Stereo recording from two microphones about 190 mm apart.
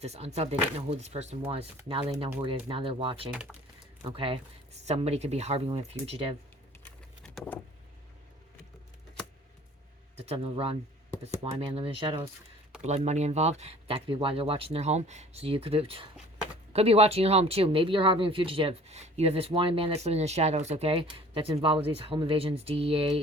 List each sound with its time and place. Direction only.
0.0 s speech: 35° right (ahead or behind)
7.3 s vehicle: 10° left (ahead or behind)
10.2 s speech: 30° right (ahead or behind)